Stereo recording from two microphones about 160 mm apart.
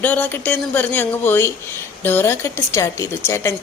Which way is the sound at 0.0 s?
10° left (ahead or behind).